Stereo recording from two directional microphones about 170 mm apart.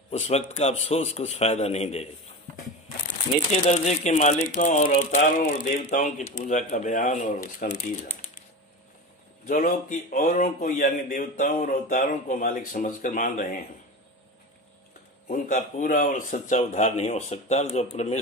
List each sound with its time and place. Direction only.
0.1 s a man's voice: 40° left (ahead or behind)
3.4 s a man's voice: 40° left (ahead or behind)
9.5 s a man's voice: 50° left (ahead or behind)
15.2 s a man's voice: 45° left (ahead or behind)